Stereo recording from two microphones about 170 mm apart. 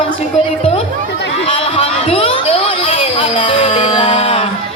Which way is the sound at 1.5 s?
35° left (ahead or behind).